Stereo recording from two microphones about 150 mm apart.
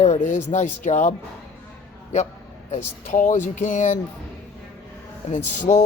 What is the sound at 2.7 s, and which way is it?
Speech, 55° left (ahead or behind).